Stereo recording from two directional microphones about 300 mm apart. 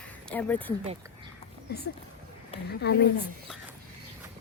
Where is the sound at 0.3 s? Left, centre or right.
Centre.